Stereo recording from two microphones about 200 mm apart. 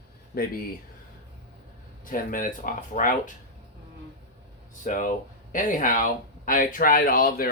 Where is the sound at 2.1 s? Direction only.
40° left (ahead or behind).